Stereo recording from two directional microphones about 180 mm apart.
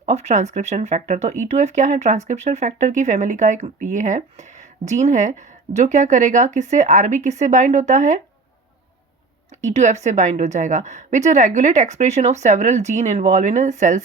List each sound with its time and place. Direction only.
0.0 s speech: 35° right (ahead or behind)
9.6 s speech: 40° right (ahead or behind)